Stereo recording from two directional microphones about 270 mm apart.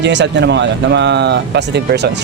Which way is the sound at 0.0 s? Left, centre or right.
Right.